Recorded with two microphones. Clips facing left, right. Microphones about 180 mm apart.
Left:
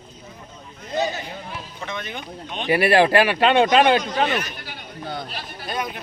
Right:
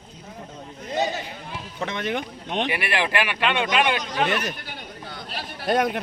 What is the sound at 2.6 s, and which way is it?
Speech, 40° left (ahead or behind).